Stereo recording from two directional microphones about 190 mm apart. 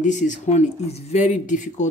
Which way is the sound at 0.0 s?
40° left (ahead or behind).